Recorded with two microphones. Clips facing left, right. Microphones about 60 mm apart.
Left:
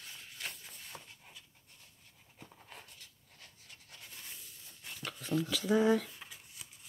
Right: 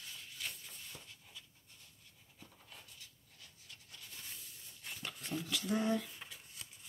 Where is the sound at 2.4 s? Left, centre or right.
Left.